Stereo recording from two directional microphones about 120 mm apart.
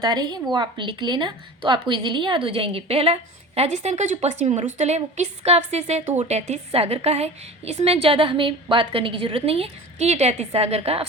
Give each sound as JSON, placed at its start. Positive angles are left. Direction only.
{"t": 0.0, "sound": "a woman's voice", "side_deg": -35}